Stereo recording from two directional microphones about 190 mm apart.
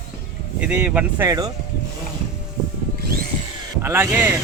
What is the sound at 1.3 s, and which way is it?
Speech, 20° right (ahead or behind).